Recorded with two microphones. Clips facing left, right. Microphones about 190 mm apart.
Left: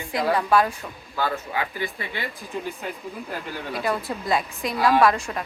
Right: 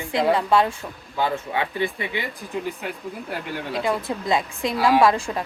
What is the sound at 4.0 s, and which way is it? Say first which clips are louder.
Speech: right 2 dB; 20° right (ahead or behind).